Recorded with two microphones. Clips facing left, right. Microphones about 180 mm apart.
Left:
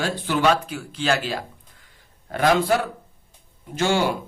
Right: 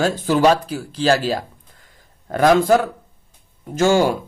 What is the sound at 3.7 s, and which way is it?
Speech, 45° right (ahead or behind).